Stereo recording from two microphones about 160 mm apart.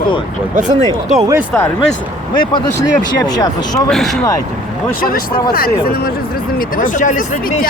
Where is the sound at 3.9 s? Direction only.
Centre (ahead or behind).